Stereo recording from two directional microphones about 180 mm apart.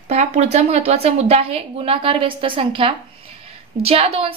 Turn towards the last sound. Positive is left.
turn(degrees=-35)  # may be behind; listen again after turning